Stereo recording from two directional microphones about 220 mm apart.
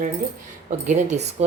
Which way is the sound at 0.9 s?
30° right (ahead or behind).